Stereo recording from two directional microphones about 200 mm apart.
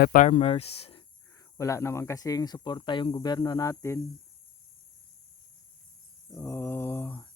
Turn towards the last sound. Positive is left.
turn(degrees=10)  # may be behind; listen again after turning